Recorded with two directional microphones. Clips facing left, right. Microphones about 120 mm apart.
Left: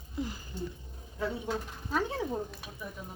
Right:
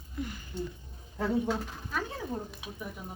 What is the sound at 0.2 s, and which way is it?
Speech, 30° left (ahead or behind).